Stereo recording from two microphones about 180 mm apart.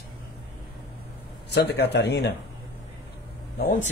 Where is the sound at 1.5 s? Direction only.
70° left (ahead or behind).